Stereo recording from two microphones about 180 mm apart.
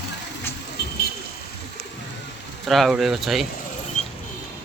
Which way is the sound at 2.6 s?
Centre (ahead or behind).